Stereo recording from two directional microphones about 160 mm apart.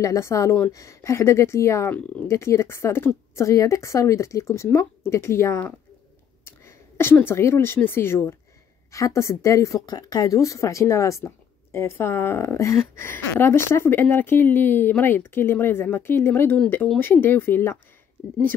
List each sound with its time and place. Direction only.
0.0 s a woman's voice: 20° left (ahead or behind)